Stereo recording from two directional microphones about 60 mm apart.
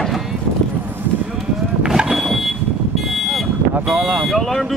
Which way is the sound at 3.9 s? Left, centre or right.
Right.